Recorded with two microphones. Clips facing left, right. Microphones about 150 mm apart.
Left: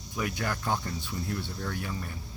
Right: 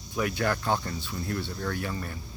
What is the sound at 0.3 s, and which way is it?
Speech, 70° right (ahead or behind).